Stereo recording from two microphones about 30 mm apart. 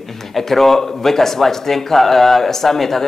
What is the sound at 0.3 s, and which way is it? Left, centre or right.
Speech, centre.